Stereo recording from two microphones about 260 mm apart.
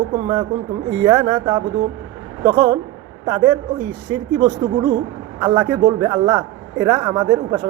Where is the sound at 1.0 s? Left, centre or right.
Centre.